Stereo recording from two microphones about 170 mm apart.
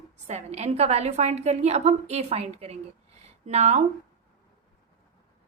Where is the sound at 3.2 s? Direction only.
40° right (ahead or behind).